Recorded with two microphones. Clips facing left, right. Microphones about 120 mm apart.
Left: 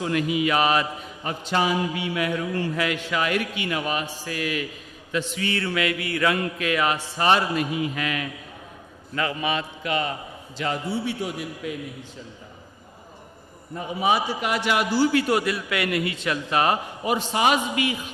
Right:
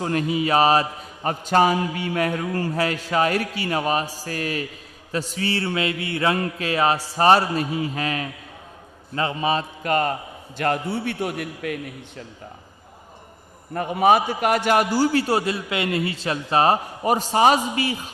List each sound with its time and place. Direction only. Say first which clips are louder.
0.0 s a man's voice: right 1 dB; 40° right (ahead or behind)
10.6 s a man's voice: right 3 dB; 55° right (ahead or behind)
13.7 s a man's voice: right 6 dB; 60° right (ahead or behind); by 18.1 s 35° right (ahead or behind)